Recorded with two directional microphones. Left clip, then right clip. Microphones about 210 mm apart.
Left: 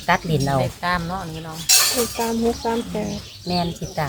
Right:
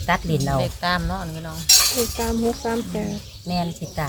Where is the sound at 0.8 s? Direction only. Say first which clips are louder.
Even; 50° right (ahead or behind).